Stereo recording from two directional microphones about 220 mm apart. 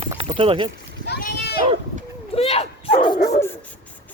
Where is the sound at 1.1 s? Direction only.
45° left (ahead or behind).